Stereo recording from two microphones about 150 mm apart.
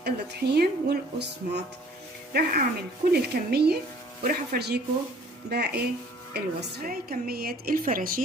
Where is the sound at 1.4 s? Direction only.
70° right (ahead or behind).